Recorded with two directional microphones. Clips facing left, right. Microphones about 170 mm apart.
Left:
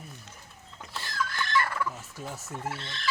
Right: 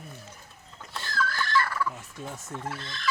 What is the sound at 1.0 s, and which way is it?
Fowl, 20° left (ahead or behind).